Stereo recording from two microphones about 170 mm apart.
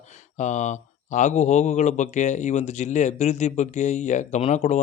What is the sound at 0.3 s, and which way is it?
Speech, 45° left (ahead or behind).